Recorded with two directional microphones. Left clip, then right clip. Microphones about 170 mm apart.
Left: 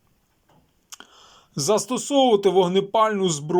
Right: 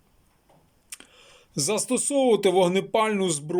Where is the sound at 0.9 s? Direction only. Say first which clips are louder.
Left 2 dB; 15° right (ahead or behind).